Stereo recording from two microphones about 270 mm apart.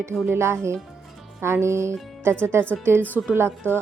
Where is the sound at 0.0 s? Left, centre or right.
Centre.